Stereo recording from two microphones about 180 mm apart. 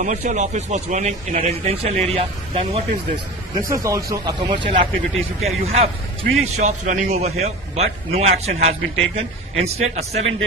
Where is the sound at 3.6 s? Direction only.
15° right (ahead or behind).